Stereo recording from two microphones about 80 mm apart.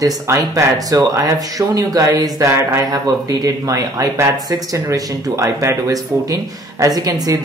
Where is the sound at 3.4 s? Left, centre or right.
Right.